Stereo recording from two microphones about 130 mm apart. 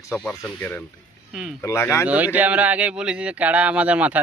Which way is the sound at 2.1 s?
10° right (ahead or behind).